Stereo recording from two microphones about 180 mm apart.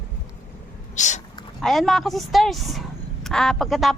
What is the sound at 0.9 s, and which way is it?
Speech, 40° left (ahead or behind).